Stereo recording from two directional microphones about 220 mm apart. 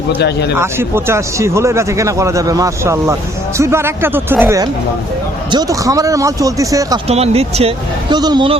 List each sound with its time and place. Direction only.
0.2 s speech: 50° left (ahead or behind)
0.5 s speech: 10° right (ahead or behind)
7.1 s speech: 30° right (ahead or behind)